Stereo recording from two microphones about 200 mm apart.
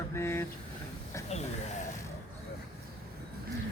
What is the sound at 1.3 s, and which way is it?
Speech, 35° left (ahead or behind).